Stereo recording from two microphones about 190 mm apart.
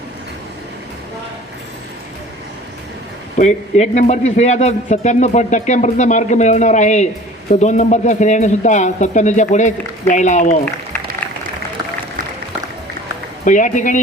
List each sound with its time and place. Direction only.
3.3 s speech: 35° left (ahead or behind)
13.4 s speech: 40° left (ahead or behind)